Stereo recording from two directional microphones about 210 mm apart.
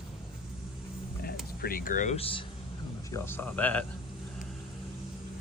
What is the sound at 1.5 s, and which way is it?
Speech, 45° left (ahead or behind).